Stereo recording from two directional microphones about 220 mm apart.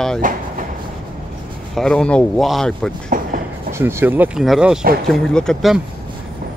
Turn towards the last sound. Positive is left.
turn(degrees=0)  # may be behind; listen again after turning